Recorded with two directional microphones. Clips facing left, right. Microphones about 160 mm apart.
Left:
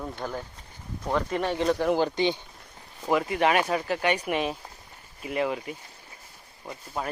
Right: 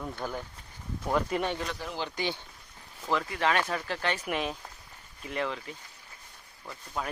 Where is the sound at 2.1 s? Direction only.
20° left (ahead or behind).